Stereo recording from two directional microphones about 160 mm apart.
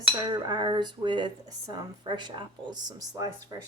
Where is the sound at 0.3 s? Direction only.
25° right (ahead or behind).